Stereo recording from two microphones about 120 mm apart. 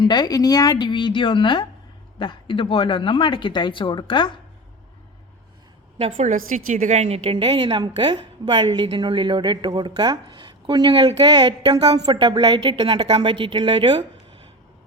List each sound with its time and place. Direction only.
0.0 s a woman's voice: 35° left (ahead or behind)
6.1 s a woman's voice: 90° right; by 14.0 s 40° right (ahead or behind)